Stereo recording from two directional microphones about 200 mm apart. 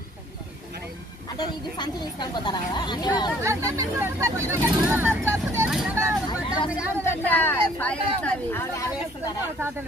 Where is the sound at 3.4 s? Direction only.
15° right (ahead or behind).